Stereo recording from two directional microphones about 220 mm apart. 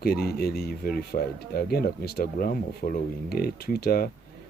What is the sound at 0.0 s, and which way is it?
Speech, 45° left (ahead or behind).